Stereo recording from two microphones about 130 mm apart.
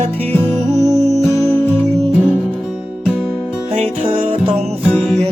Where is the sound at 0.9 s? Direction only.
60° right (ahead or behind).